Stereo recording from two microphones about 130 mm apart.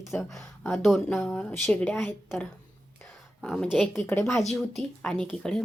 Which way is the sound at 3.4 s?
5° left (ahead or behind).